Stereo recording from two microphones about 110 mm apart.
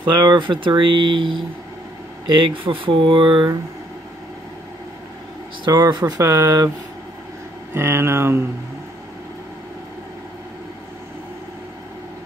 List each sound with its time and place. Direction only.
0.0 s speech: 40° right (ahead or behind)
5.7 s speech: 40° right (ahead or behind)
6.2 s speech: 25° right (ahead or behind)
7.7 s speech: 25° right (ahead or behind)